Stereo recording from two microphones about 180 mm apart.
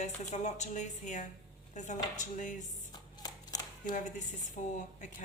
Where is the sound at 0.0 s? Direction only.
40° left (ahead or behind).